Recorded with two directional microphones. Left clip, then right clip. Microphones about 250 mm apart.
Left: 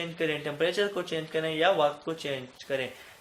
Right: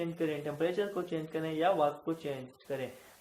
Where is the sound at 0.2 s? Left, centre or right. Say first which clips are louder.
Left 6 dB; left.